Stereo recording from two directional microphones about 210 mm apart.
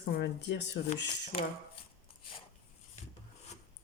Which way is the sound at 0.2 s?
55° left (ahead or behind).